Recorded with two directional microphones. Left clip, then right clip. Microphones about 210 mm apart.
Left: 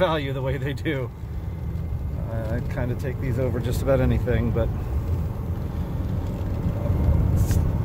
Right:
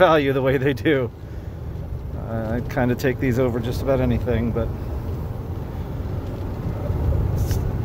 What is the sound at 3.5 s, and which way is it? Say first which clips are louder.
Speech: right 1 dB; centre (ahead or behind).